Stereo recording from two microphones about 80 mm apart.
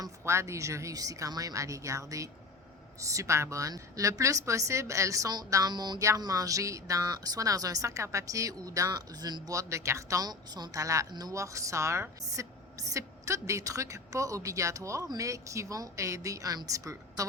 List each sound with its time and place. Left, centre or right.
0.3 s a woman's voice: right
5.7 s speech: right
6.0 s speech: right
8.9 s speech: right
10.2 s speech: right
11.1 s speech: right
11.3 s a woman's voice: right